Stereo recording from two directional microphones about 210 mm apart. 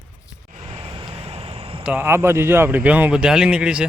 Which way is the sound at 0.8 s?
25° right (ahead or behind).